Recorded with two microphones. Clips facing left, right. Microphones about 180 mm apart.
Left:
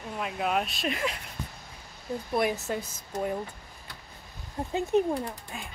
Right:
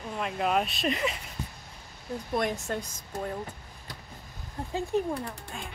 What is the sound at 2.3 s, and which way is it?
Speech, 5° left (ahead or behind).